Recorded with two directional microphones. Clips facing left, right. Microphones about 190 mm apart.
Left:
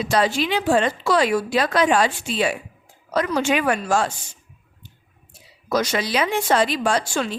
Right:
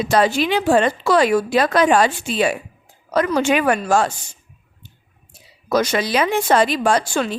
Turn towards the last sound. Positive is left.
turn(degrees=-55)  # may be behind; listen again after turning